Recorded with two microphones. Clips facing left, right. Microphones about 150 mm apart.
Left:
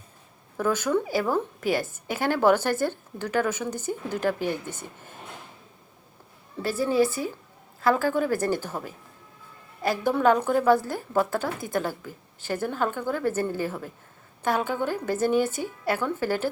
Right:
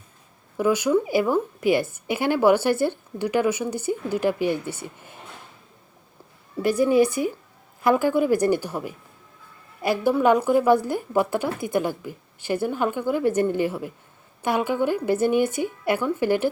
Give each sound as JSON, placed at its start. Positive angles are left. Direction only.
{"t": 0.5, "sound": "a woman's voice", "side_deg": -10}
{"t": 6.6, "sound": "a woman's voice", "side_deg": -15}